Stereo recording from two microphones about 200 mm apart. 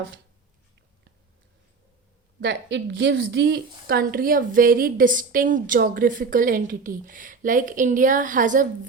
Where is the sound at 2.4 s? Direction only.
65° right (ahead or behind).